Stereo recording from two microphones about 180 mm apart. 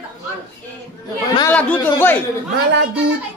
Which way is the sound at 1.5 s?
10° left (ahead or behind).